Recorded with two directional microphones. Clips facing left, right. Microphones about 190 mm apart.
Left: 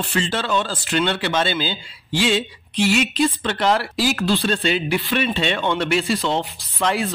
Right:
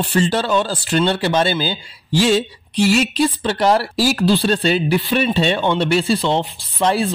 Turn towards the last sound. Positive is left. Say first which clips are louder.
# right 4 dB
turn(degrees=-30)  # may be behind; listen again after turning